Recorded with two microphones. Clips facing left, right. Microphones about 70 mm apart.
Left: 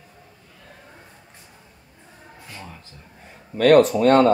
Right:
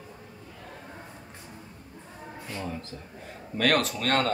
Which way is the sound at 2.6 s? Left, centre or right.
Centre.